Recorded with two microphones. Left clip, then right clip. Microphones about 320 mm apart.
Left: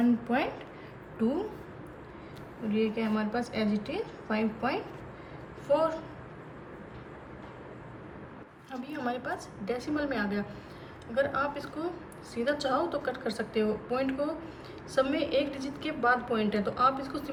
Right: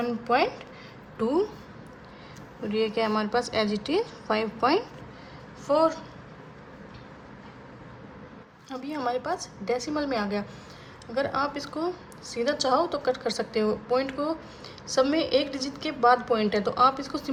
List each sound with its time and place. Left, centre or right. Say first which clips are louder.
2.7 s a woman's voice: right 5 dB; right
8.7 s a woman's voice: right 5 dB; centre